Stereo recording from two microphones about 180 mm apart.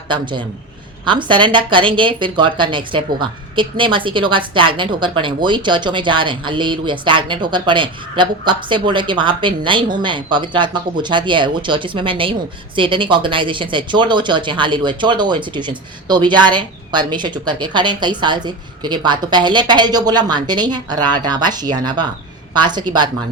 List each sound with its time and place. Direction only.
0.1 s speech: 25° right (ahead or behind)